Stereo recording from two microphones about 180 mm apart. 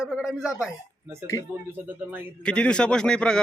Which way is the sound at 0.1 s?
Centre (ahead or behind).